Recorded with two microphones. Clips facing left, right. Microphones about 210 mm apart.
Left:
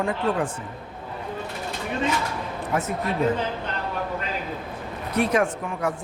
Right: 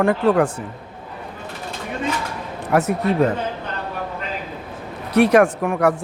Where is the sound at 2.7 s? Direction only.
70° right (ahead or behind).